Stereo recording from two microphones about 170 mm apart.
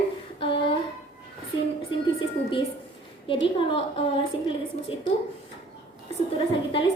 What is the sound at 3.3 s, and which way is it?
Speech, 30° left (ahead or behind).